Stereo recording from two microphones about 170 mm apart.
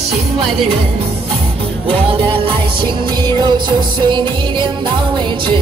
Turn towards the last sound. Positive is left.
turn(degrees=-25)  # may be behind; listen again after turning